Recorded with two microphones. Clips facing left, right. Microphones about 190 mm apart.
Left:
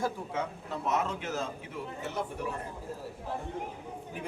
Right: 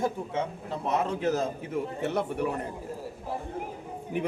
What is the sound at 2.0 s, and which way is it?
Speech, 65° right (ahead or behind).